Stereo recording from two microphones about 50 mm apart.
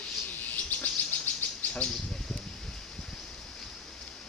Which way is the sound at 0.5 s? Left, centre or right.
Left.